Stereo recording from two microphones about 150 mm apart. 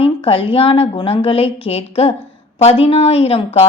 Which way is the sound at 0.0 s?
35° left (ahead or behind).